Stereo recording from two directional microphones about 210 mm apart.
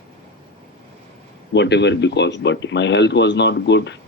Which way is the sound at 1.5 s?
55° left (ahead or behind).